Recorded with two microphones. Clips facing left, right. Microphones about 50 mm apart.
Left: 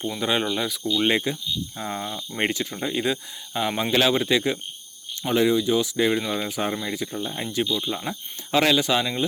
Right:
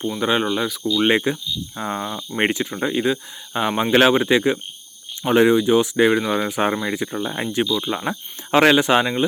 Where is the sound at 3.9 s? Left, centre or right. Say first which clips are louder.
Right 6 dB; right.